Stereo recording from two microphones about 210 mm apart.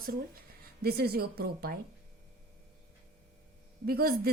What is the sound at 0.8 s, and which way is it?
A woman's voice, 50° right (ahead or behind).